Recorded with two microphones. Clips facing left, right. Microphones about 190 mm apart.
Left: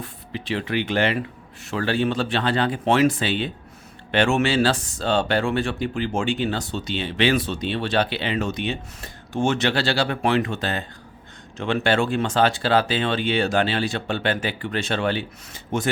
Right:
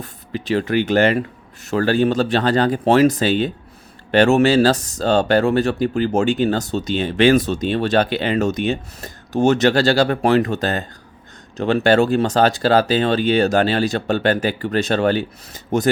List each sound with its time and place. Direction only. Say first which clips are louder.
0.0 s speech: right 5 dB; 45° right (ahead or behind)